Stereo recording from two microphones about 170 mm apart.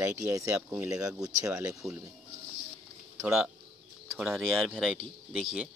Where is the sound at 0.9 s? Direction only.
5° right (ahead or behind).